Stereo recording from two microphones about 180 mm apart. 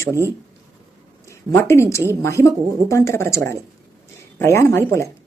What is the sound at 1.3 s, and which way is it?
Speech, 15° left (ahead or behind).